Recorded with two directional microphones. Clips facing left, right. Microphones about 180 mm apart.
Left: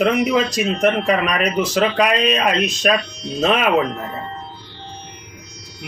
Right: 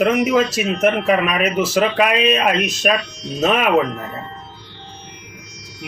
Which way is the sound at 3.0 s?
30° left (ahead or behind).